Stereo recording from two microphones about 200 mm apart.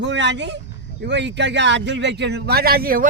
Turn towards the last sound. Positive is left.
turn(degrees=-45)  # may be behind; listen again after turning